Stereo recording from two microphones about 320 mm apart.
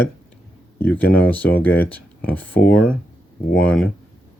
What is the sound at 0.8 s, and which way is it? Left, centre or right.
Speech, centre.